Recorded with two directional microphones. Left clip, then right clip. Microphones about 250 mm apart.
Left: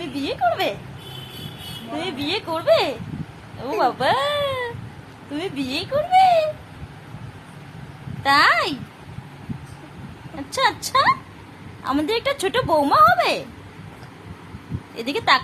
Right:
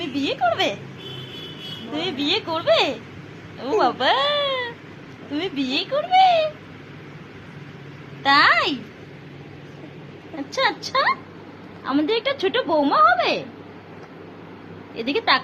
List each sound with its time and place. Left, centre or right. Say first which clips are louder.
0.0 s speech: even; centre
2.0 s speech: right 3 dB; centre
8.2 s speech: even; centre
10.5 s a woman's voice: left 2 dB; centre
14.9 s a woman's voice: left 1 dB; centre